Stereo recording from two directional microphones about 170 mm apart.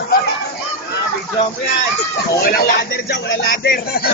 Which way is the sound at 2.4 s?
65° left (ahead or behind).